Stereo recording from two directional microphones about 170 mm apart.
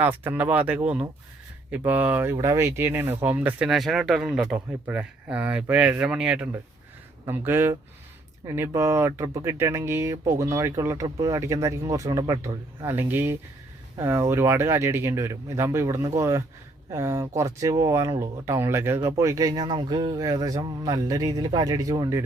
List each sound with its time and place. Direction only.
0.0 s speech: 10° right (ahead or behind)